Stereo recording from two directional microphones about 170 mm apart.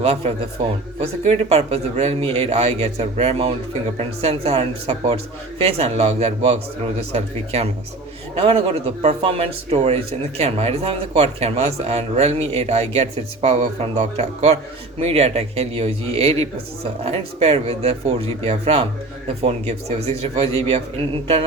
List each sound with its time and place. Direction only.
0.0 s a man's voice: 35° right (ahead or behind)